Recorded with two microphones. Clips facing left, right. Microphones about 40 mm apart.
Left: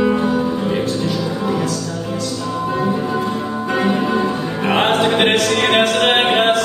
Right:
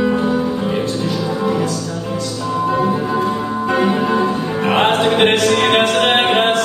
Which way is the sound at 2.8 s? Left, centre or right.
Centre.